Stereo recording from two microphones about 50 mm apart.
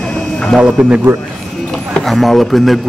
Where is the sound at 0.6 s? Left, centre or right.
Centre.